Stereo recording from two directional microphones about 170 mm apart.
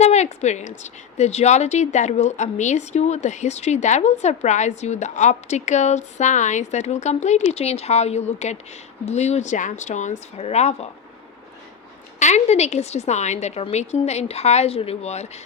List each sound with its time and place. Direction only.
0.0 s a woman's voice: 40° left (ahead or behind)
12.2 s a woman's voice: 40° left (ahead or behind)